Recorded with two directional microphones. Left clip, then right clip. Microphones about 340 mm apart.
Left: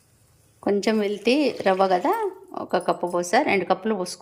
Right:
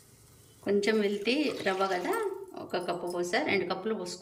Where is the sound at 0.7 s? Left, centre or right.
Centre.